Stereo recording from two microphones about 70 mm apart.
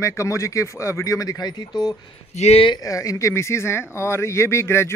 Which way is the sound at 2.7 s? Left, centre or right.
Left.